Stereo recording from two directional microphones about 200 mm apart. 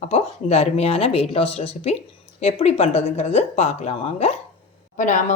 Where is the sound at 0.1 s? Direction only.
30° left (ahead or behind).